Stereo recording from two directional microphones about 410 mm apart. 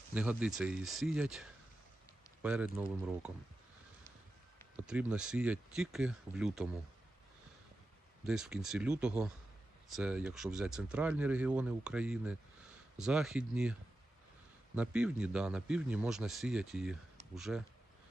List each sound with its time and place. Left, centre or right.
0.1 s a man's voice: centre
4.8 s a man's voice: centre
8.2 s a man's voice: centre
14.8 s a man's voice: centre